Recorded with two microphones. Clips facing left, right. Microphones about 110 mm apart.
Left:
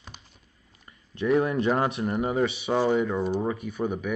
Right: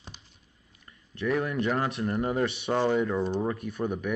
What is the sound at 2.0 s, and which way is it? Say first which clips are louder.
Speech: left 2 dB; 10° left (ahead or behind).